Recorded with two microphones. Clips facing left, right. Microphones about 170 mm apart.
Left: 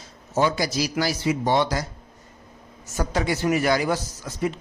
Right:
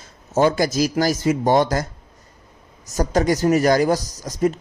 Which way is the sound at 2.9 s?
40° right (ahead or behind).